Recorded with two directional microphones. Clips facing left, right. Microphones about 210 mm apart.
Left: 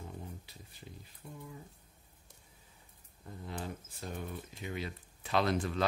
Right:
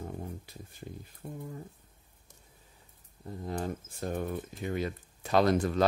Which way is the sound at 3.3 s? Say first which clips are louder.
Right 7 dB; 40° right (ahead or behind).